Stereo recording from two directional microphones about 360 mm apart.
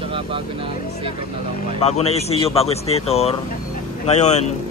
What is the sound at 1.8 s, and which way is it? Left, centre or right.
Speech, centre.